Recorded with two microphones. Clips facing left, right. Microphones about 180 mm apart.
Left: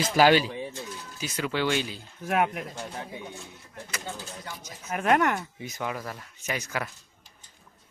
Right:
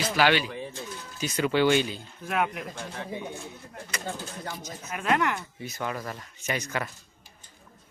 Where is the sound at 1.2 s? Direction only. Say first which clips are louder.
Right 5 dB; centre (ahead or behind).